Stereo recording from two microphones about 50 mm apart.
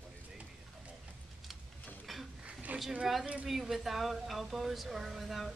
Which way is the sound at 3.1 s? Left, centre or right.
Centre.